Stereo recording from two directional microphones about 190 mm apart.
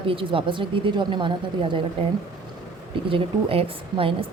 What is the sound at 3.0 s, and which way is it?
A woman's voice, 30° right (ahead or behind).